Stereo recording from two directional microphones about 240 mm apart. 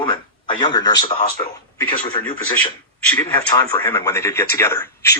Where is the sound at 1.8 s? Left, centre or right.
Centre.